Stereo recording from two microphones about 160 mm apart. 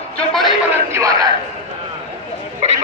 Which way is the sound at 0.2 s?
Centre (ahead or behind).